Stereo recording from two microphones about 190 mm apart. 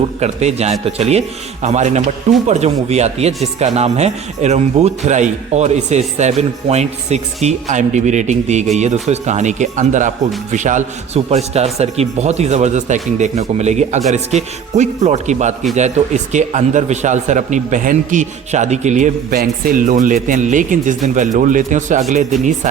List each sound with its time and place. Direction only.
0.2 s a man's voice: 35° right (ahead or behind)